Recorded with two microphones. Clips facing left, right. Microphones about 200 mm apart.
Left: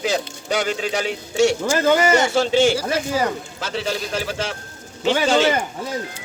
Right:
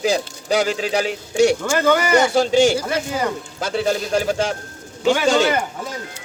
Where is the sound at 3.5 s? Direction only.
45° right (ahead or behind).